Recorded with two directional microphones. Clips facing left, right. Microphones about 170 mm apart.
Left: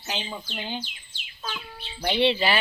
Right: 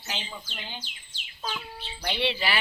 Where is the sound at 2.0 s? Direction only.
25° left (ahead or behind).